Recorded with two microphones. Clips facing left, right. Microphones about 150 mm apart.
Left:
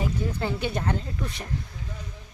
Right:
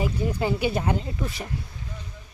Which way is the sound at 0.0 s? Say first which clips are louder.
Right 3 dB; 10° right (ahead or behind).